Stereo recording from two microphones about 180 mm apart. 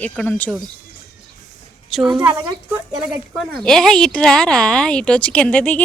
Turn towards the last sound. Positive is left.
turn(degrees=10)  # may be behind; listen again after turning